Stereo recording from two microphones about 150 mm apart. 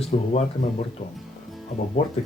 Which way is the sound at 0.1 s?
50° left (ahead or behind).